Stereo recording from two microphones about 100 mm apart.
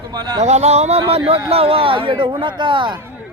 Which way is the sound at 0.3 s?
90° right.